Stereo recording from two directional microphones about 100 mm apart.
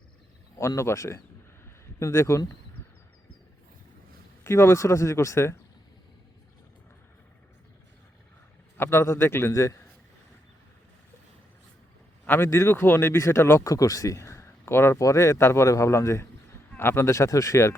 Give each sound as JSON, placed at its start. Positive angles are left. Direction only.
{"t": 0.8, "sound": "speech", "side_deg": 30}
{"t": 4.4, "sound": "speech", "side_deg": 25}
{"t": 8.8, "sound": "speech", "side_deg": 25}
{"t": 12.2, "sound": "speech", "side_deg": 20}